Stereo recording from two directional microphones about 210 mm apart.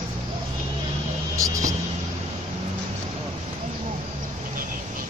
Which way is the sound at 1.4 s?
15° right (ahead or behind).